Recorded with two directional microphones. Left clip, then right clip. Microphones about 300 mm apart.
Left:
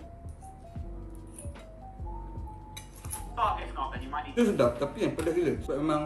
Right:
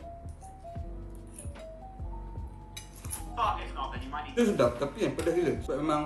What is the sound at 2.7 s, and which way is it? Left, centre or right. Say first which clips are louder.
A man's voice: right 3 dB; centre.